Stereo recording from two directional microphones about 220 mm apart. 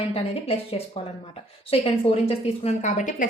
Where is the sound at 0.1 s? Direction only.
25° left (ahead or behind).